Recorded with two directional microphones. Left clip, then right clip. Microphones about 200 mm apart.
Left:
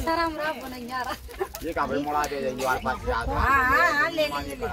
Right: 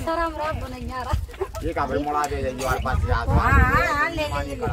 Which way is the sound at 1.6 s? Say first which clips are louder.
Right 3 dB; 10° right (ahead or behind).